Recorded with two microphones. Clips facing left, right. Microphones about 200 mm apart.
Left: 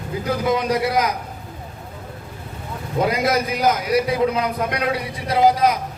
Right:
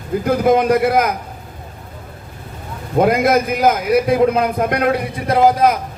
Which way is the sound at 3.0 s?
50° right (ahead or behind).